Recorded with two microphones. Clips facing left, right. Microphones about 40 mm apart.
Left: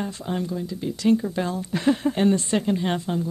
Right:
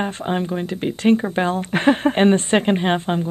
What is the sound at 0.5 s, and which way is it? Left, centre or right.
Speech, right.